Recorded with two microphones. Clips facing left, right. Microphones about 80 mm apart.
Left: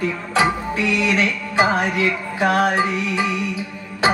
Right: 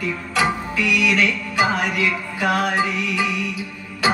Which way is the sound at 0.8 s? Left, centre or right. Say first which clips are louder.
Right 1 dB; left.